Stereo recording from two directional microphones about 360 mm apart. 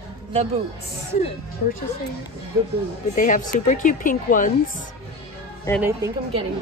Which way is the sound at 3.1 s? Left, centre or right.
Left.